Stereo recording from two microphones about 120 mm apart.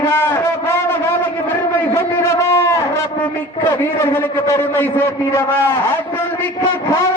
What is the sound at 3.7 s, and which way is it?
A man's voice, 20° left (ahead or behind).